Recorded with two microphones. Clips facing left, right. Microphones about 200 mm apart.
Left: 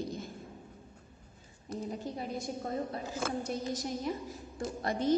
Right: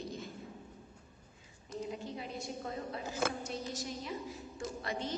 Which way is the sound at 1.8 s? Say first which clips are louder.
Left 4 dB; 40° left (ahead or behind).